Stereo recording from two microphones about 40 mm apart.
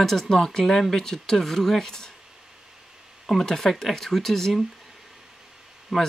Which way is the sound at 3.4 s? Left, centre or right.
Centre.